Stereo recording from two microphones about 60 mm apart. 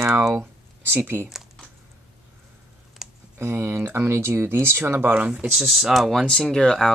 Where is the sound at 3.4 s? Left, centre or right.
Right.